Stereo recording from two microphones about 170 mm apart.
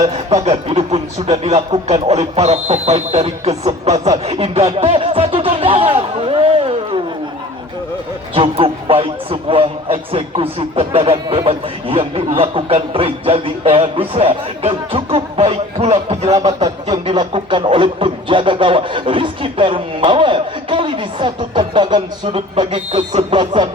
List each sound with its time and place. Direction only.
0.1 s speech: 40° right (ahead or behind)
8.4 s speech: 30° right (ahead or behind)